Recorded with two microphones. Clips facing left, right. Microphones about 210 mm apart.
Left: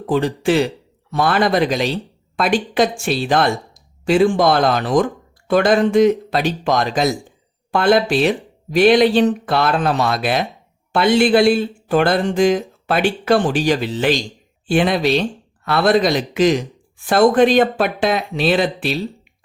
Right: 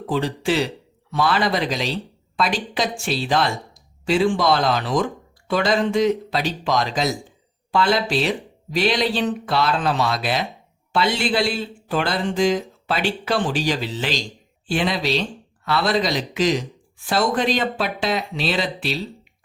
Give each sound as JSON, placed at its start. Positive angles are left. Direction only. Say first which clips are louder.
{"t": 0.1, "sound": "speech", "louder": "left 5 dB", "side_deg": 55}